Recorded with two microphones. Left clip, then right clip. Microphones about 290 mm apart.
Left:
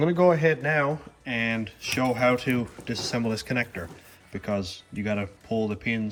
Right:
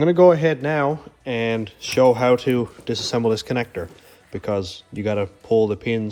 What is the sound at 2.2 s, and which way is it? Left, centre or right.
A man's voice, centre.